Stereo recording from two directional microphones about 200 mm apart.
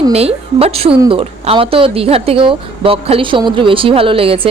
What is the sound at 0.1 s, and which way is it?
A woman's voice, 30° right (ahead or behind).